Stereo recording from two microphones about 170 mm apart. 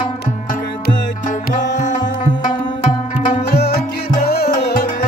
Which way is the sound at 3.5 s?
70° left (ahead or behind).